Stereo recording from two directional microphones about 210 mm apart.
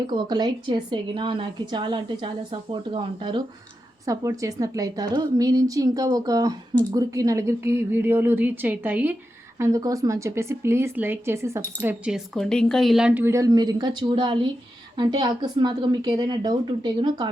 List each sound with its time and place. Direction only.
0.1 s a woman's voice: 20° right (ahead or behind)